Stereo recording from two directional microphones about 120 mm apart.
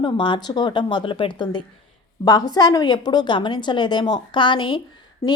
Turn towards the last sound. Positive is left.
turn(degrees=25)  # may be behind; listen again after turning